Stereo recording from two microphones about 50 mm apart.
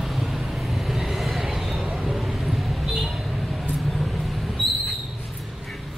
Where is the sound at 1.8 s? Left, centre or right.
Centre.